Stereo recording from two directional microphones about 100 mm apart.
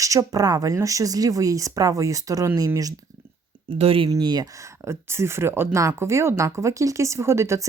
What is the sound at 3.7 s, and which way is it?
Speech, 70° right (ahead or behind).